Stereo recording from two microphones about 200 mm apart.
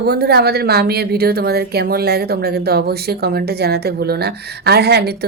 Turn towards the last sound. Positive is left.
turn(degrees=-55)  # may be behind; listen again after turning